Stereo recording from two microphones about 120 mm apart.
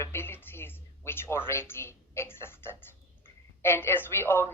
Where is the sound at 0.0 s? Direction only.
20° left (ahead or behind).